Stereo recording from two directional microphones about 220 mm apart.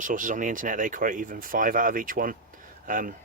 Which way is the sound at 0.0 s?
35° right (ahead or behind).